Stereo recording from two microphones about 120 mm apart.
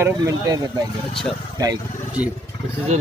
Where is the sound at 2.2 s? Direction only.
10° right (ahead or behind).